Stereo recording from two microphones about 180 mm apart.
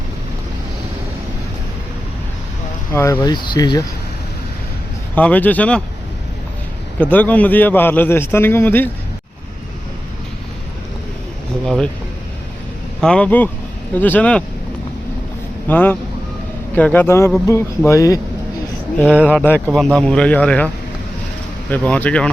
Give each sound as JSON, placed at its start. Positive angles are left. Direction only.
{"t": 2.9, "sound": "speech", "side_deg": 15}
{"t": 5.1, "sound": "a man's voice", "side_deg": 10}
{"t": 7.0, "sound": "a man's voice", "side_deg": 10}
{"t": 11.6, "sound": "speech", "side_deg": 5}
{"t": 13.0, "sound": "a man's voice", "side_deg": 5}
{"t": 15.6, "sound": "a man's voice", "side_deg": 10}
{"t": 19.0, "sound": "speech", "side_deg": -5}
{"t": 19.3, "sound": "a man's voice", "side_deg": 10}
{"t": 21.7, "sound": "a man's voice", "side_deg": 10}